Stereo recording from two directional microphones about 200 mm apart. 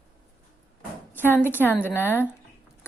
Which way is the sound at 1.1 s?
10° left (ahead or behind).